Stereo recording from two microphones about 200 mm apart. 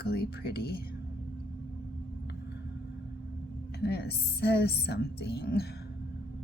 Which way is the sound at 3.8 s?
55° left (ahead or behind).